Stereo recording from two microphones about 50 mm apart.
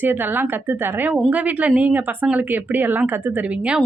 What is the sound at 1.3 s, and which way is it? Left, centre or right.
A woman's voice, right.